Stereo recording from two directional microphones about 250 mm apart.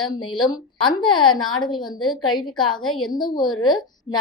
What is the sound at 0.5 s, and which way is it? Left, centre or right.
A woman's voice, centre.